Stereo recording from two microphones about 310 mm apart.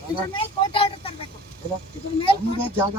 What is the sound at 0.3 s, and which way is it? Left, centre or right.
Vehicle, centre.